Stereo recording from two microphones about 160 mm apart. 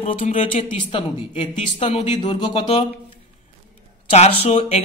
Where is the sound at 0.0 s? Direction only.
40° left (ahead or behind).